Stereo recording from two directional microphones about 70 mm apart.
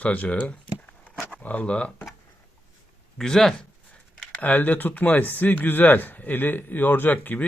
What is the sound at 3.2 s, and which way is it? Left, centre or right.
Speech, centre.